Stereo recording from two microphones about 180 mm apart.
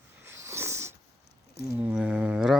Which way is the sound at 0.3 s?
15° right (ahead or behind).